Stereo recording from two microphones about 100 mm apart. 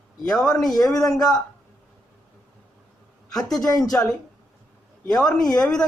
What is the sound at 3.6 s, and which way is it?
Speech, 35° left (ahead or behind).